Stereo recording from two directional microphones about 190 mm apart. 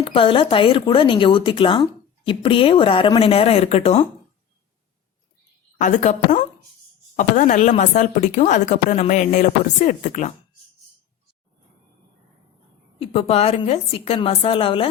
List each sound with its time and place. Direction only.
0.0 s speech: 30° left (ahead or behind)
5.8 s a woman's voice: 40° left (ahead or behind)
13.0 s speech: 30° left (ahead or behind)